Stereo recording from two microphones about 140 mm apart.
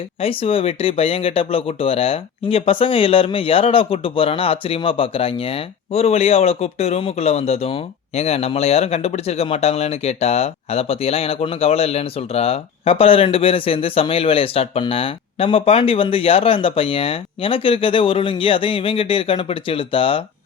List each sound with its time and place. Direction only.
0.2 s speech: 40° left (ahead or behind)